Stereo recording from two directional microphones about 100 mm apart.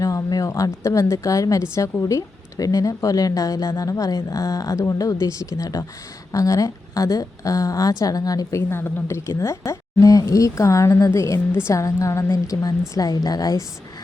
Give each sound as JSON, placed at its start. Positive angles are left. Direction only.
{"t": 0.0, "sound": "a woman's voice", "side_deg": 35}